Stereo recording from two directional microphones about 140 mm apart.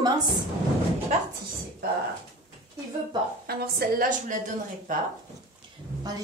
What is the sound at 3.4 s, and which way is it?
Speech, 90° right.